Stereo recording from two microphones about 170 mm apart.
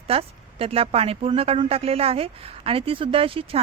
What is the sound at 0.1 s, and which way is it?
Speech, 35° right (ahead or behind).